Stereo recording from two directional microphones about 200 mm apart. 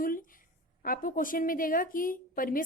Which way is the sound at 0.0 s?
45° left (ahead or behind).